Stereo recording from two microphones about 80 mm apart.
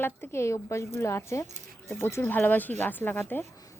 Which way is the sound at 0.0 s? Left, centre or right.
Left.